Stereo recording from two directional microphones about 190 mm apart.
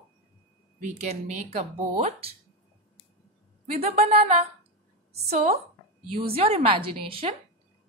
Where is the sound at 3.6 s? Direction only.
35° right (ahead or behind).